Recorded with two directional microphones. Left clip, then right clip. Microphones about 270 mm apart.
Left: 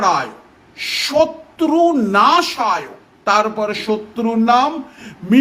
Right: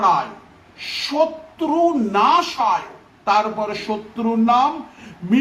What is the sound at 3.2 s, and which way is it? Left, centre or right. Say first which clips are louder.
Speech: left 3 dB; left.